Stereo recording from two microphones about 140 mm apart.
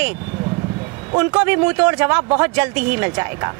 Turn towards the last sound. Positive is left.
turn(degrees=-20)  # may be behind; listen again after turning